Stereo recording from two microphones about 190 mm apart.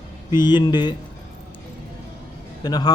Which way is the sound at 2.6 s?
20° left (ahead or behind).